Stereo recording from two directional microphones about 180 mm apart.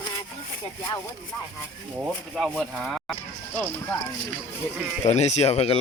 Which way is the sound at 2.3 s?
Centre (ahead or behind).